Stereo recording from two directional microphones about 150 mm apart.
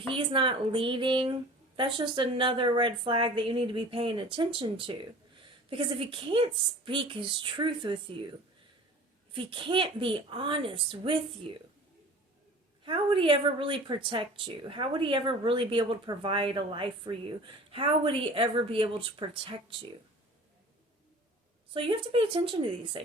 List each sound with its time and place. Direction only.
0.1 s speech: 35° right (ahead or behind)
9.3 s speech: 35° right (ahead or behind)
12.8 s speech: 35° right (ahead or behind)
21.7 s speech: 35° right (ahead or behind)